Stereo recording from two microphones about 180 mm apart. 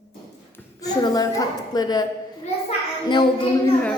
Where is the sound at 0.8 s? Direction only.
20° left (ahead or behind).